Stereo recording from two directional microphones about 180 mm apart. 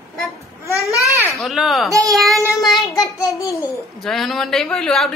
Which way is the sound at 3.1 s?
15° left (ahead or behind).